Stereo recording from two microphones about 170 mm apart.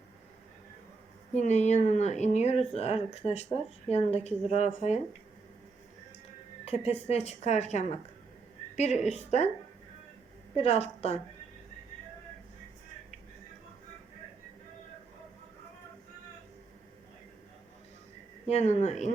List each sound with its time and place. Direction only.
1.4 s speech: 45° left (ahead or behind)
6.7 s a woman's voice: 40° left (ahead or behind)
10.5 s speech: 35° left (ahead or behind)
18.4 s speech: 40° left (ahead or behind)